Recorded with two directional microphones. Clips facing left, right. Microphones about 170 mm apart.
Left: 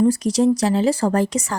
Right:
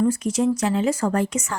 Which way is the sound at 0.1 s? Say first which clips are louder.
Left 4 dB; 35° left (ahead or behind).